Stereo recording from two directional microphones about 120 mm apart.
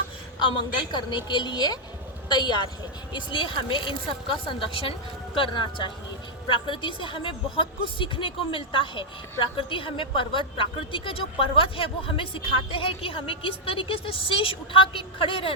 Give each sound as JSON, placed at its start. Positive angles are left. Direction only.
{"t": 0.3, "sound": "a woman's voice", "side_deg": 40}